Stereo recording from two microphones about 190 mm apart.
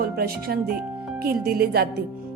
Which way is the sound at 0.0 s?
50° right (ahead or behind).